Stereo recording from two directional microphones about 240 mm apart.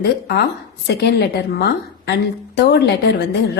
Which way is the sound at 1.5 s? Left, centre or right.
Left.